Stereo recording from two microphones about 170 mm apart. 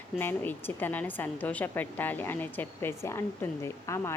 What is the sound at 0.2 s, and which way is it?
A woman's voice, 10° left (ahead or behind).